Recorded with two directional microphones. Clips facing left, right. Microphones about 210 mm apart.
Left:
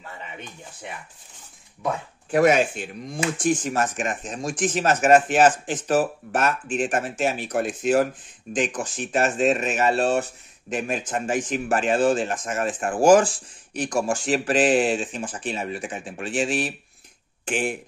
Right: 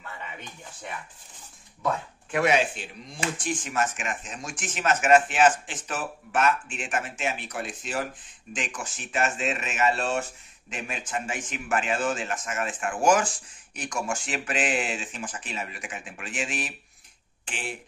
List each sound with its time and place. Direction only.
2.3 s speech: 45° left (ahead or behind)
8.5 s speech: 35° left (ahead or behind)
17.5 s speech: 50° left (ahead or behind)